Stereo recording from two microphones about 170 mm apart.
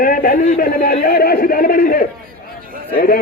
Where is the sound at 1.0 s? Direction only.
65° left (ahead or behind).